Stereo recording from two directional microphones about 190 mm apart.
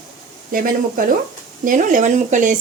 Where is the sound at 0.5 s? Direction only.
45° right (ahead or behind).